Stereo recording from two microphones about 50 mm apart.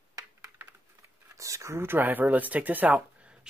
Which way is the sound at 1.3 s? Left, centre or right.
Right.